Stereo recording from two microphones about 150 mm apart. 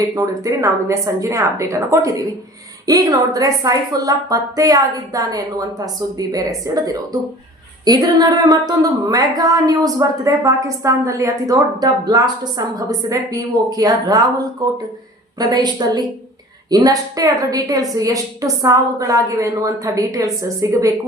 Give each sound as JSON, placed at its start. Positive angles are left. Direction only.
{"t": 0.1, "sound": "speech", "side_deg": -20}